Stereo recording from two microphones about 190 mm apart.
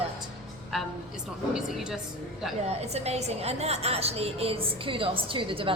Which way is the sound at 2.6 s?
35° right (ahead or behind).